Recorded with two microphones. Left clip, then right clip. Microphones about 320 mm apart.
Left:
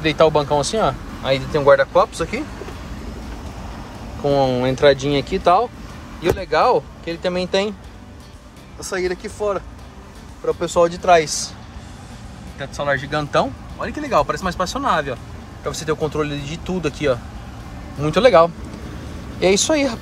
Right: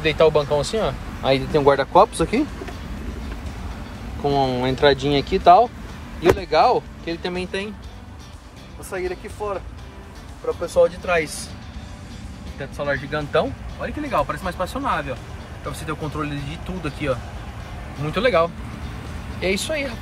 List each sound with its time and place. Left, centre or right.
0.0 s speech: centre
4.2 s speech: centre
8.9 s speech: left
10.6 s speech: left
11.1 s speech: centre
12.5 s speech: centre